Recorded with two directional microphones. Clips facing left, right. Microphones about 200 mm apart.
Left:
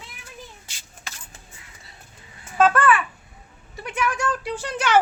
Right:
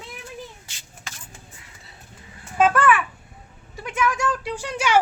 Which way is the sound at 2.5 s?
10° right (ahead or behind).